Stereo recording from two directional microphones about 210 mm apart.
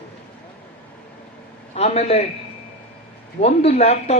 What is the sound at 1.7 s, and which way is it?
Speech, 30° left (ahead or behind).